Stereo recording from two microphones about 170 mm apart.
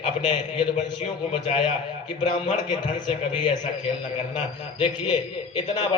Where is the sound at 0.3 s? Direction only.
30° left (ahead or behind).